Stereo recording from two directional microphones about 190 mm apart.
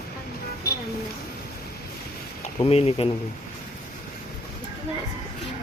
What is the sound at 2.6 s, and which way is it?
Speech, 30° left (ahead or behind).